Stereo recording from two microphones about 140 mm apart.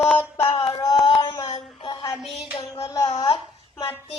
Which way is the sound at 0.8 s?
30° left (ahead or behind).